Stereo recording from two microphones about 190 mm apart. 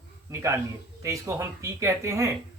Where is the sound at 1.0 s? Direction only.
15° right (ahead or behind).